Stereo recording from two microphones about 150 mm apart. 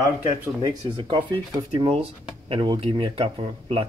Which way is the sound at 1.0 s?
30° right (ahead or behind).